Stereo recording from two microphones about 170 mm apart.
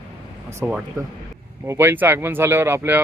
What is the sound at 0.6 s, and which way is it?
Speech, 15° right (ahead or behind).